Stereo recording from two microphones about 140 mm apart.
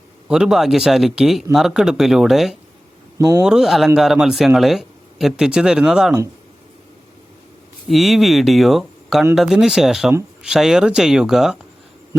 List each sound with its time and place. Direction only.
0.3 s speech: 5° right (ahead or behind)
3.2 s speech: 25° right (ahead or behind)
3.4 s speech: 5° right (ahead or behind)
7.9 s speech: centre (ahead or behind)